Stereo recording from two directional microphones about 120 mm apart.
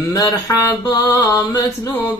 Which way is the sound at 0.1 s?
30° left (ahead or behind).